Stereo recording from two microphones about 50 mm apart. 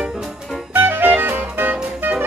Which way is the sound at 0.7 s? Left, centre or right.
Right.